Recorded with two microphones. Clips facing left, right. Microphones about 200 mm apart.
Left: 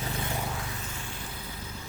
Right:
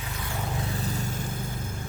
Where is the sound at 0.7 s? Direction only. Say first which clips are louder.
Right 9 dB; 40° right (ahead or behind).